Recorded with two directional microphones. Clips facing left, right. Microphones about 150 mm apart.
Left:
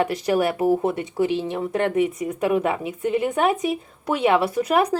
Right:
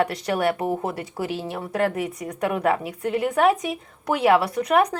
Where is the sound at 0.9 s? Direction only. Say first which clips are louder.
Left 6 dB; 20° left (ahead or behind).